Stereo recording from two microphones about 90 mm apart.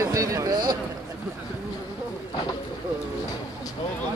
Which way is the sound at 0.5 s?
50° right (ahead or behind).